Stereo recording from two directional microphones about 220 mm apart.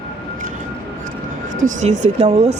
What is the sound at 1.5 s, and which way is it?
Speech, 35° right (ahead or behind).